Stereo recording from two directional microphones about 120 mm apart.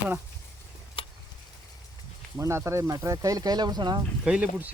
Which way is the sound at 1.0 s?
45° left (ahead or behind).